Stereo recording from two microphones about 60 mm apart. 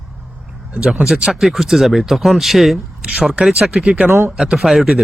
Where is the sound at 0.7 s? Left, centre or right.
Right.